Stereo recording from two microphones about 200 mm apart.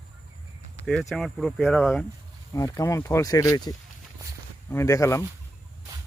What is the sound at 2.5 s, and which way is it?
Speech, 15° left (ahead or behind).